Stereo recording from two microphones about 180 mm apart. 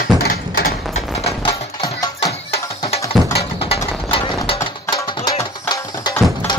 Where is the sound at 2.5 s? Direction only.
35° left (ahead or behind).